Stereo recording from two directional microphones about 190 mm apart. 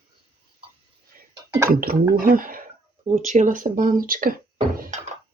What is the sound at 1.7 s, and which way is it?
Speech, 50° right (ahead or behind).